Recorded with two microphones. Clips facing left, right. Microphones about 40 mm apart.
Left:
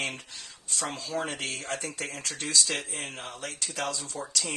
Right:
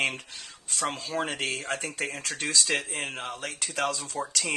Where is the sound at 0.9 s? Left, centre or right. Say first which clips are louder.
Right 1 dB; right.